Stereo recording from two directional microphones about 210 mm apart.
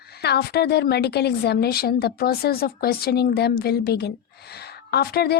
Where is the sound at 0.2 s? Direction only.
50° left (ahead or behind).